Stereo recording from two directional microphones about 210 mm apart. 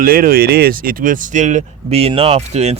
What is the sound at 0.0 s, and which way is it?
Speech, 45° right (ahead or behind).